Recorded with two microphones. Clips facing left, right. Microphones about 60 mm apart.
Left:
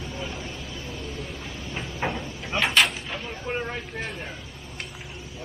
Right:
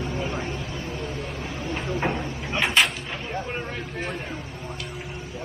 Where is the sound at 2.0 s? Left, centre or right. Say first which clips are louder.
Right 2 dB; centre.